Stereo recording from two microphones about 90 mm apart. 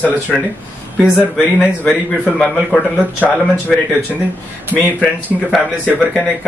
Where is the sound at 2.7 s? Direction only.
15° left (ahead or behind).